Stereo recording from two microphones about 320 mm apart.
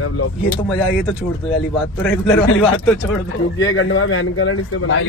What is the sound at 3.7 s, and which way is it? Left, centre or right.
Speech, left.